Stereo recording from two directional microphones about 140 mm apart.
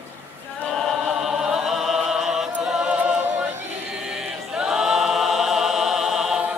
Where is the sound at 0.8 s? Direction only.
5° right (ahead or behind).